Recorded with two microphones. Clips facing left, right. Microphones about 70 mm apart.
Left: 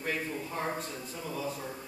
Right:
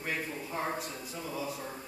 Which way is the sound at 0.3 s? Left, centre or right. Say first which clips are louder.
Left 1 dB; centre.